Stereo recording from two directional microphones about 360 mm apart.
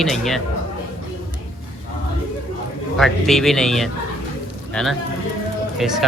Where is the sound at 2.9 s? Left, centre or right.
Centre.